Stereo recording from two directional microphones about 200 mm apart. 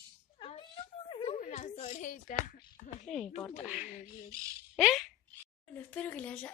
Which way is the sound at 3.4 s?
5° right (ahead or behind).